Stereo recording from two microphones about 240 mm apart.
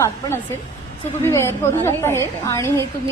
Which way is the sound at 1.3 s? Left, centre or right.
Centre.